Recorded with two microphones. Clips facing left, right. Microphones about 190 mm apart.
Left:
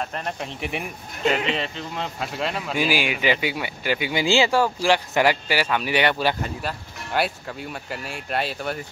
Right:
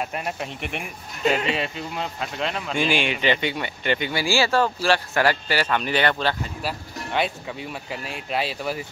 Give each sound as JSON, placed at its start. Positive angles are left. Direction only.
{"t": 0.0, "sound": "speech", "side_deg": -10}
{"t": 0.6, "sound": "speech", "side_deg": 0}
{"t": 4.1, "sound": "speech", "side_deg": 20}